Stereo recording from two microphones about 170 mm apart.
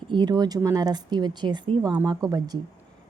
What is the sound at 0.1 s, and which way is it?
A woman's voice, 25° right (ahead or behind).